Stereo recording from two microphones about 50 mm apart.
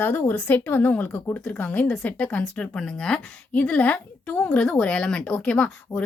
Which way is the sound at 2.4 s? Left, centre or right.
Centre.